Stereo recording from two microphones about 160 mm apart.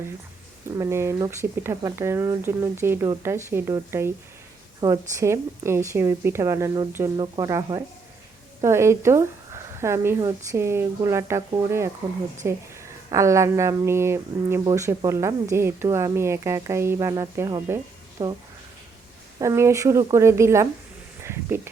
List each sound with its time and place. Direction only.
0.8 s speech: 15° right (ahead or behind)
19.4 s speech: 15° right (ahead or behind)
21.2 s a sound: 15° right (ahead or behind)